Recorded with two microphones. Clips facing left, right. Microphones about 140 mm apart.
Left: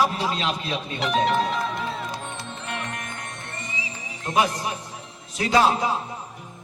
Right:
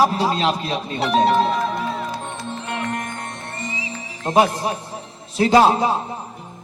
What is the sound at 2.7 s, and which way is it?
Music, 35° right (ahead or behind).